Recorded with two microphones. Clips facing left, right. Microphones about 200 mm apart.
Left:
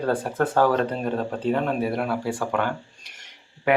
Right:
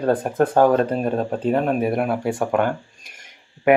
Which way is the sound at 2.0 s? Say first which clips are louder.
Right 4 dB; 20° right (ahead or behind).